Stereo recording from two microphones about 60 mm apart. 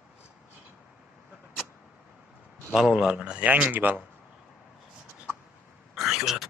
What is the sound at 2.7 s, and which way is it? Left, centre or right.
Speech, centre.